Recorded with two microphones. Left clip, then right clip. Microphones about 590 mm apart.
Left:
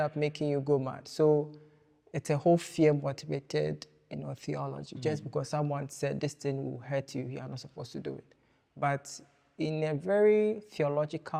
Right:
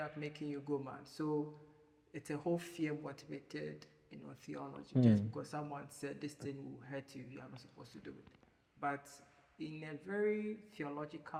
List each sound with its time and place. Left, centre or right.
0.0 s speech: left